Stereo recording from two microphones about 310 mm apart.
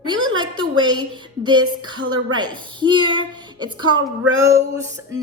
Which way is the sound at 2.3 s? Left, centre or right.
Centre.